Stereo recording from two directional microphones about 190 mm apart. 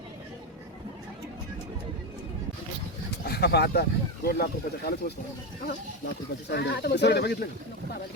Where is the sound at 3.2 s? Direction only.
55° left (ahead or behind).